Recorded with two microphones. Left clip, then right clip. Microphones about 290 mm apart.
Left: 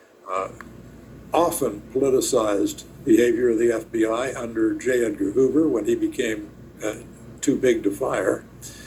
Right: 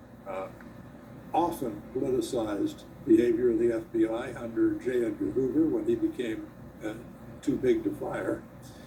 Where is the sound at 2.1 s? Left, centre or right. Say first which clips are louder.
Left 9 dB; left.